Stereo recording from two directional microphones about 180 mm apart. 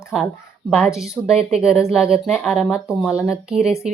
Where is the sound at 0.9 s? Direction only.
Centre (ahead or behind).